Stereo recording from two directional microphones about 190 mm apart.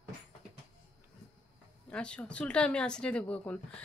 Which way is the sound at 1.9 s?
5° left (ahead or behind).